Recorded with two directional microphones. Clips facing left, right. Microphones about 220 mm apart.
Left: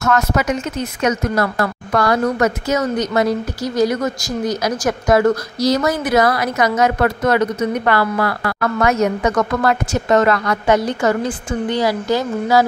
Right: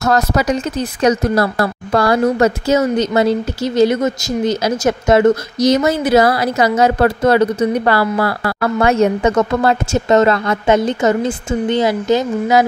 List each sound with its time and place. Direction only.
0.0 s a woman's voice: 35° right (ahead or behind)